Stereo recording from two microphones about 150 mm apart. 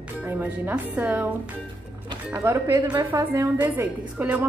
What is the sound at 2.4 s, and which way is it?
Speech, 20° right (ahead or behind).